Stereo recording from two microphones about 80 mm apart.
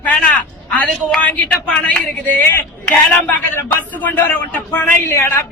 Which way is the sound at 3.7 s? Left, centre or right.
Left.